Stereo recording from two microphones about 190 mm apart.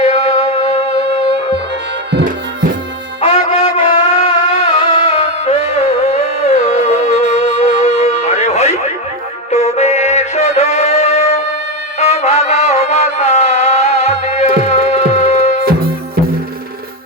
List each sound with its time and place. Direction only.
0.0 s music: 35° left (ahead or behind)
2.1 s music: 50° right (ahead or behind)
3.2 s music: 35° left (ahead or behind)